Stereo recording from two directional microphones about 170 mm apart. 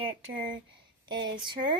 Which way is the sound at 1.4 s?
25° right (ahead or behind).